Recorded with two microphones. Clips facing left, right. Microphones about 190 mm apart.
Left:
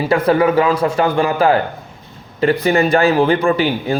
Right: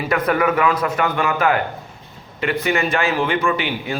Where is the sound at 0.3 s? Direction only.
30° left (ahead or behind).